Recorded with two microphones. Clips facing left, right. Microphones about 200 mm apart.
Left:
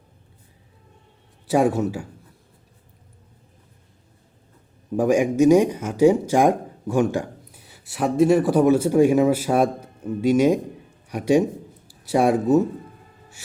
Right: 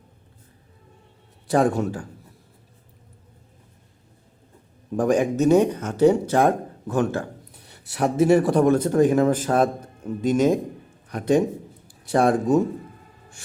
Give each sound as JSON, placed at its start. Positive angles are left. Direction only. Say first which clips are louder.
{"t": 1.5, "sound": "speech", "louder": "left 1 dB", "side_deg": 5}
{"t": 4.9, "sound": "speech", "louder": "left 2 dB", "side_deg": 10}
{"t": 7.6, "sound": "speech", "louder": "even", "side_deg": 0}